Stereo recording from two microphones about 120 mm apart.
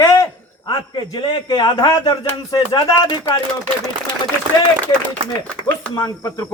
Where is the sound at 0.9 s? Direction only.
35° left (ahead or behind).